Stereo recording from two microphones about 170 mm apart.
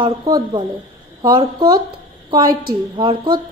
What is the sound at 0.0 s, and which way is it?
A woman's voice, 25° right (ahead or behind).